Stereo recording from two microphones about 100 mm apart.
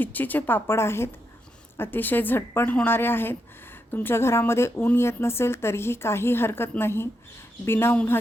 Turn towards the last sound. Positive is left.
turn(degrees=25)  # may be behind; listen again after turning